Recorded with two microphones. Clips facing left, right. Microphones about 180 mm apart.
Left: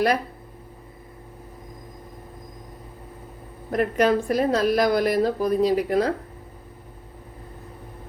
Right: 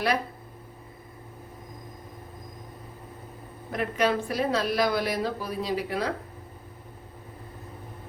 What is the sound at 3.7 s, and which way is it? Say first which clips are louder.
A woman's voice: left 6 dB; 45° left (ahead or behind).